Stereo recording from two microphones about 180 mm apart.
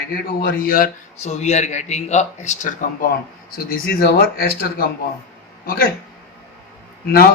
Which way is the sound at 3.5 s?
55° left (ahead or behind).